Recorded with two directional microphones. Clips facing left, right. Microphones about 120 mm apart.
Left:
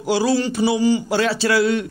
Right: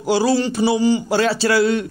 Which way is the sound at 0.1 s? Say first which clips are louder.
Right 1 dB; 30° right (ahead or behind).